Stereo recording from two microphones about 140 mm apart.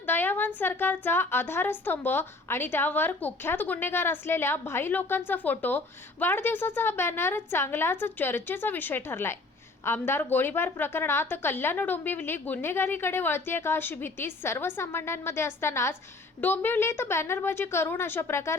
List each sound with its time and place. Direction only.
0.0 s a woman's voice: 15° left (ahead or behind)